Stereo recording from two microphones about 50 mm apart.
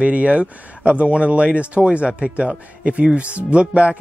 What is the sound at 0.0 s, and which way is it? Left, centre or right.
Speech, right.